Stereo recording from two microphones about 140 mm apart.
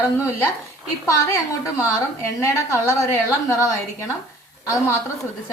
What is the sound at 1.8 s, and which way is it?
A woman's voice, 20° left (ahead or behind).